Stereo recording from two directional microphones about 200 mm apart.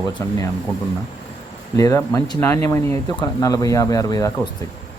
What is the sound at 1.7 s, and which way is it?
Speech, 15° left (ahead or behind).